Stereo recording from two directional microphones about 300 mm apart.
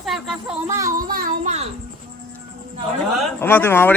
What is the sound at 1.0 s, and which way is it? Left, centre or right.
Child singing, right.